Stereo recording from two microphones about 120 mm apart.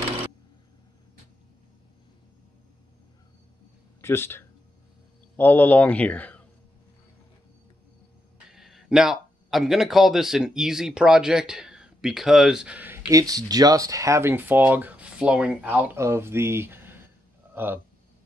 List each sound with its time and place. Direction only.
4.0 s a man's voice: 20° left (ahead or behind)
8.5 s speech: centre (ahead or behind)
13.1 s speech: 30° right (ahead or behind)